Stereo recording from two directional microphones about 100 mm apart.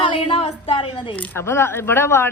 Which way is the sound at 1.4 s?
25° left (ahead or behind).